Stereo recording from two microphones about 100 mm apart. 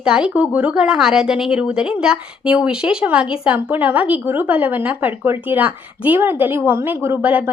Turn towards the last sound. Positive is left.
turn(degrees=-15)  # may be behind; listen again after turning